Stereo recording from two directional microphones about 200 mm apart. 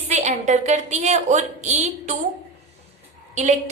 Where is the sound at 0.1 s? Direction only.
35° right (ahead or behind).